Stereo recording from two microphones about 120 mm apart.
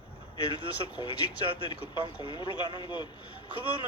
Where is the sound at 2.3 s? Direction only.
35° left (ahead or behind).